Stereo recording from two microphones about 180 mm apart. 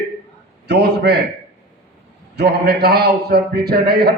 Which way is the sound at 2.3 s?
65° right (ahead or behind).